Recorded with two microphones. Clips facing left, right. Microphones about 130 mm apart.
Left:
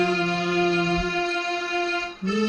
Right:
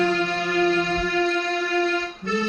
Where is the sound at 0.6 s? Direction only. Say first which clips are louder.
Right 2 dB; 25° left (ahead or behind).